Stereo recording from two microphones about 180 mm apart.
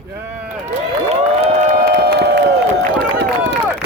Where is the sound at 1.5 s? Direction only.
40° right (ahead or behind).